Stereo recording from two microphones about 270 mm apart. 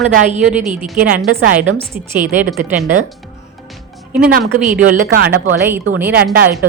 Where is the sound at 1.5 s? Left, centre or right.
Centre.